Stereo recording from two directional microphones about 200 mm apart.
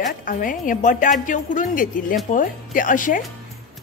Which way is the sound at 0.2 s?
40° left (ahead or behind).